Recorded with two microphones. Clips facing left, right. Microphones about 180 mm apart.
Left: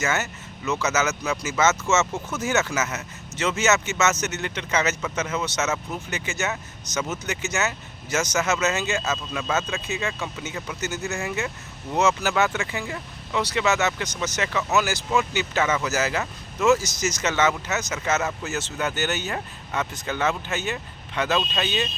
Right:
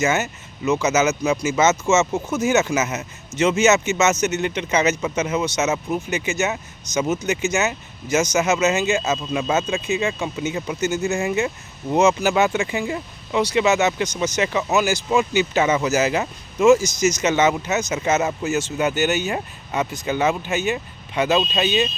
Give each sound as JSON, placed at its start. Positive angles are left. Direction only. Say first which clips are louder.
{"t": 0.0, "sound": "speech", "louder": "right 5 dB", "side_deg": -15}